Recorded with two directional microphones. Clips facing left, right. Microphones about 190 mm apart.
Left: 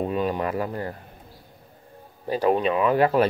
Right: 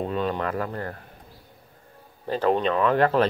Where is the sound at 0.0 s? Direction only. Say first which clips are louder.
Left 2 dB; 10° left (ahead or behind).